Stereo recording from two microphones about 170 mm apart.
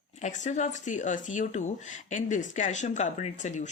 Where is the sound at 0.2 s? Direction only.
45° left (ahead or behind).